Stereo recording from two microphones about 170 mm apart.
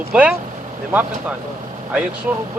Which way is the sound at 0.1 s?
5° right (ahead or behind).